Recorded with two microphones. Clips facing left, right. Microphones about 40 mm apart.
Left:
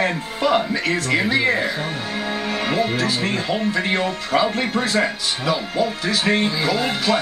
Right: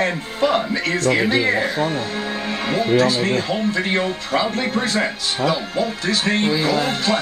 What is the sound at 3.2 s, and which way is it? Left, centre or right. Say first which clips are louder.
Speech: right 2 dB; centre.